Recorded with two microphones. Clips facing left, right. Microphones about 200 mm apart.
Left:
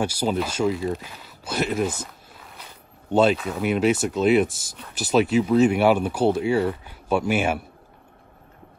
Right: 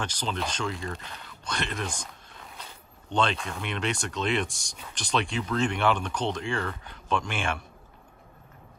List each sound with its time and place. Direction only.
0.0 s speech: 10° left (ahead or behind)